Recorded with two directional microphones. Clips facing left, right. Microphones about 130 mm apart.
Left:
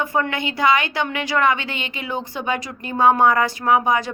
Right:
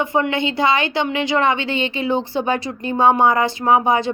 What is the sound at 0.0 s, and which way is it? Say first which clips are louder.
A woman's voice: right 3 dB; 20° right (ahead or behind).